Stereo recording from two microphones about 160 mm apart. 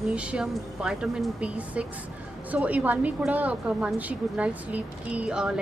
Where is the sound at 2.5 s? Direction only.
10° right (ahead or behind).